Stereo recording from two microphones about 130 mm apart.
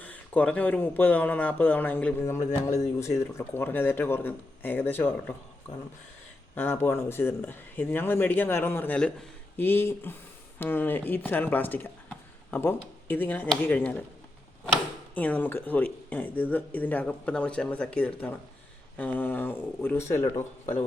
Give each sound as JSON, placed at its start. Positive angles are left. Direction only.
{"t": 0.0, "sound": "speech", "side_deg": 10}
{"t": 2.6, "sound": "speech", "side_deg": 20}
{"t": 6.6, "sound": "speech", "side_deg": 15}
{"t": 15.1, "sound": "speech", "side_deg": 10}